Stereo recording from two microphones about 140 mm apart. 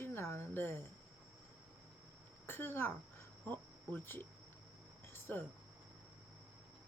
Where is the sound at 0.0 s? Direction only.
15° left (ahead or behind).